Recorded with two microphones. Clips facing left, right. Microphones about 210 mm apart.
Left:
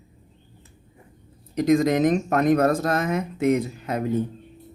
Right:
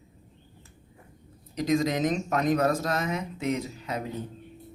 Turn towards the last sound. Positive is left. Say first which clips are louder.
# left 7 dB
turn(degrees=55)  # may be behind; listen again after turning